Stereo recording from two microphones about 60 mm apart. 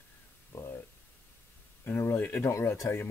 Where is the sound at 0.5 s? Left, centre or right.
Left.